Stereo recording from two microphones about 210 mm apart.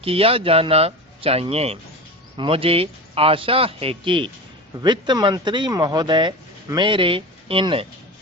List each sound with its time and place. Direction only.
0.0 s speech: 25° right (ahead or behind)